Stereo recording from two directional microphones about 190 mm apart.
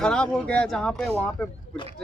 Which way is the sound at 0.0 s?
5° left (ahead or behind).